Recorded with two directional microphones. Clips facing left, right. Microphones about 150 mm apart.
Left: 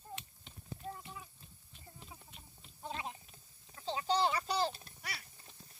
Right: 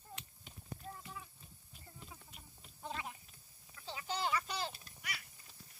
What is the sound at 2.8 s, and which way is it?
Speech, 25° left (ahead or behind).